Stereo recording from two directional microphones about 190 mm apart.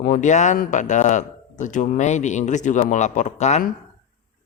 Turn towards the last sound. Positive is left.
turn(degrees=35)  # may be behind; listen again after turning